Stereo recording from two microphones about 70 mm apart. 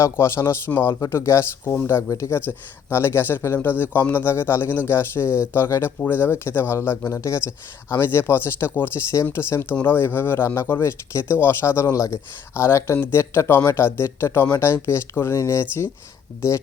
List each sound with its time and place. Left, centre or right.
0.0 s speech: left
1.0 s speech: left
2.4 s speech: left
15.6 s speech: left